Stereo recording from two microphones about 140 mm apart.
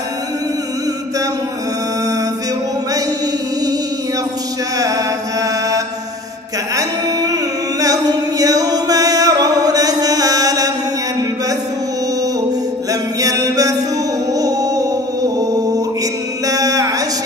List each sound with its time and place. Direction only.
4.7 s mantra: 25° right (ahead or behind)
6.7 s music: 25° right (ahead or behind)
7.8 s a capella: 25° right (ahead or behind)
13.2 s a capella: 25° right (ahead or behind)
14.3 s music: 25° right (ahead or behind)